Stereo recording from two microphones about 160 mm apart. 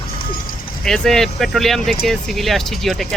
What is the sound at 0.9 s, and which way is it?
Speech, 5° left (ahead or behind).